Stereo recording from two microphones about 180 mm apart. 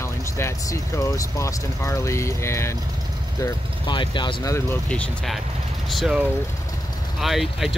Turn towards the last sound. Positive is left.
turn(degrees=0)  # may be behind; listen again after turning